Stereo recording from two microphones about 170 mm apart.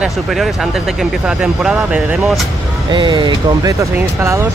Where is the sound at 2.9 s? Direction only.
25° right (ahead or behind).